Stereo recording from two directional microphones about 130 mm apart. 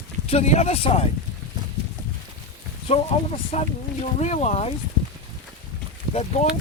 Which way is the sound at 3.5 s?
55° left (ahead or behind).